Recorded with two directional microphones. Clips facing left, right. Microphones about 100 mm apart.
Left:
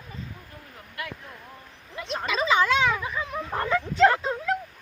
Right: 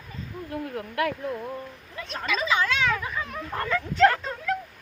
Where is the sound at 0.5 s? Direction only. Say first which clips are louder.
Right 14 dB; 65° right (ahead or behind).